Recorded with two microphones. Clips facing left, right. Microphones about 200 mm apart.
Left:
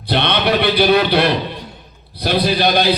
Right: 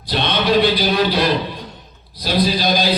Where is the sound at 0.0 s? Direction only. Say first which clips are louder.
Left 2 dB; 65° left (ahead or behind).